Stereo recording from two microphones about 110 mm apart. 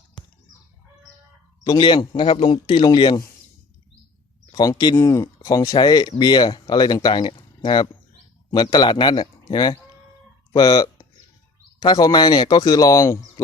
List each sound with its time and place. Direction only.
1.6 s speech: 40° left (ahead or behind)
4.5 s speech: 35° left (ahead or behind)